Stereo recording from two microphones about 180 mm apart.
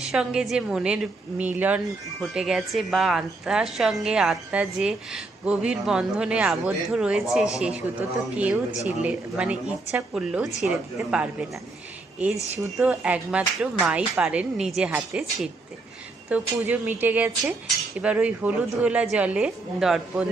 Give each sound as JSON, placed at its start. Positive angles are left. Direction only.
{"t": 0.1, "sound": "a woman's voice", "side_deg": -5}
{"t": 8.7, "sound": "speech", "side_deg": 40}
{"t": 9.0, "sound": "a woman's voice", "side_deg": -5}
{"t": 12.5, "sound": "speech", "side_deg": -5}